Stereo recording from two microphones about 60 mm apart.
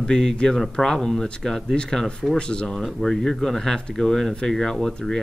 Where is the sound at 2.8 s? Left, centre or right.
Centre.